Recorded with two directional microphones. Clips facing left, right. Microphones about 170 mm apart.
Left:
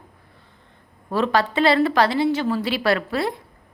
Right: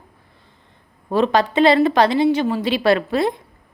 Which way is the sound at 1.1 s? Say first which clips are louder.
Right 3 dB; 20° right (ahead or behind).